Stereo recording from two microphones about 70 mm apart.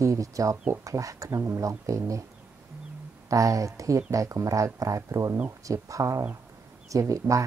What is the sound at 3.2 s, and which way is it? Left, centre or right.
Speech, right.